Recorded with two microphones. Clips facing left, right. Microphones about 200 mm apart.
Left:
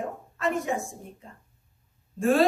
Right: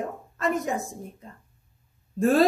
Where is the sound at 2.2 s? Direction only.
40° right (ahead or behind).